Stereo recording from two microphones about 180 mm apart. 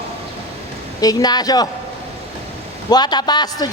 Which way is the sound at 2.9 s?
25° left (ahead or behind).